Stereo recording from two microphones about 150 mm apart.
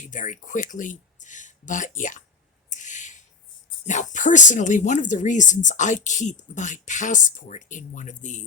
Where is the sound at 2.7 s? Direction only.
55° left (ahead or behind).